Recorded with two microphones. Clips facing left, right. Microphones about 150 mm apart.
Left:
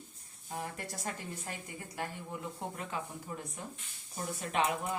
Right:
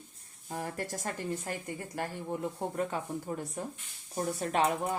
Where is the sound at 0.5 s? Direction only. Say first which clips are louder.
Right 4 dB; 45° right (ahead or behind).